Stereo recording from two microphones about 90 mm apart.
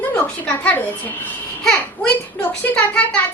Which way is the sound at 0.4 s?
15° left (ahead or behind).